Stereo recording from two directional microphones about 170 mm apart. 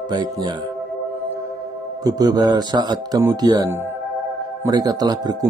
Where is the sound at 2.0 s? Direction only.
20° right (ahead or behind).